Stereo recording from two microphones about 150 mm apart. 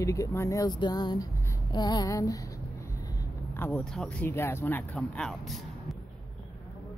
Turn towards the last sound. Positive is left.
turn(degrees=0)  # may be behind; listen again after turning